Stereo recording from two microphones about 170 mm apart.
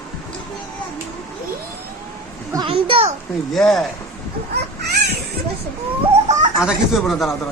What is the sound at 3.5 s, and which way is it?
Speech, 5° left (ahead or behind).